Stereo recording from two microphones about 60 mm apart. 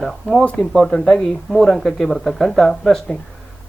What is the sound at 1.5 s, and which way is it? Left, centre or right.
Speech, centre.